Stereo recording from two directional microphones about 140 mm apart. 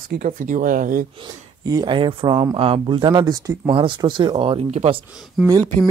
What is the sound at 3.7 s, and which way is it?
Speech, 35° right (ahead or behind).